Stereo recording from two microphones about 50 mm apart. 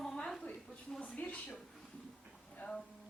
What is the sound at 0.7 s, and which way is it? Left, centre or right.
Speech, centre.